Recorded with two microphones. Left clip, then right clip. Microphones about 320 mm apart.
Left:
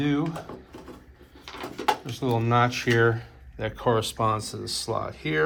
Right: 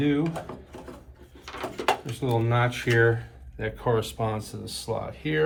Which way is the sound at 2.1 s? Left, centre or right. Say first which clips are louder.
Left 3 dB; centre.